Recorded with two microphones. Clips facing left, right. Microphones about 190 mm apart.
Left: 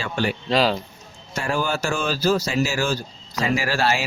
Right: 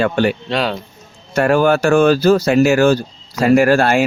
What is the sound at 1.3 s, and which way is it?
Speech, 65° right (ahead or behind).